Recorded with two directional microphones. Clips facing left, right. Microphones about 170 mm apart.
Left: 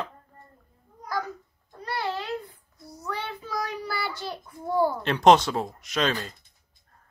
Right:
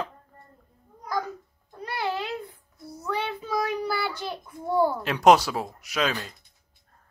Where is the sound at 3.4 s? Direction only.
15° right (ahead or behind).